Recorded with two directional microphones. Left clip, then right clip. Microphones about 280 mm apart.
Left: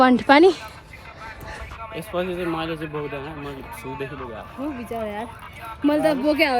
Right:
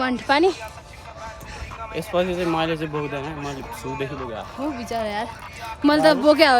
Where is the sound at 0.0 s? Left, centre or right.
Centre.